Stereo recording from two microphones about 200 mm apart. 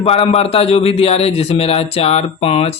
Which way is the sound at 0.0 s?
30° left (ahead or behind).